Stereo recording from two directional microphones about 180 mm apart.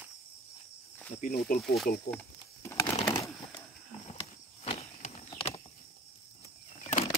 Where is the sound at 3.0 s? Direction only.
20° left (ahead or behind).